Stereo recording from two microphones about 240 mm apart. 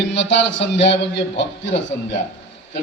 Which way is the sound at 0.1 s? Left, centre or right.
Left.